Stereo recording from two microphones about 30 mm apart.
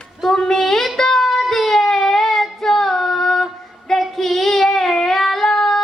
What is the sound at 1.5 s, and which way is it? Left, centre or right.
Child singing, centre.